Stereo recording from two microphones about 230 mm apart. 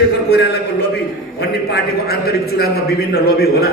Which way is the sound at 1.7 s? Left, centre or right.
Left.